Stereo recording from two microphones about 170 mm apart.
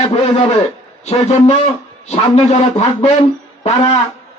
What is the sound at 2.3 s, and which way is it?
Speech, 40° left (ahead or behind).